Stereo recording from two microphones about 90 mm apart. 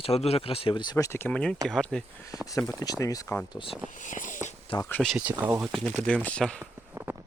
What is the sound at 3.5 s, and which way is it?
Speech, 80° left.